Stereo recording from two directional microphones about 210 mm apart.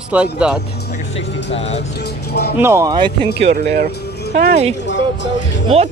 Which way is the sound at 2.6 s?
15° right (ahead or behind).